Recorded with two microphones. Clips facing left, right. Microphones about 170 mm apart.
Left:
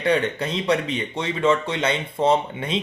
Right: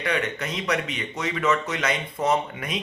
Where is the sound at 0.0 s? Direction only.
30° left (ahead or behind).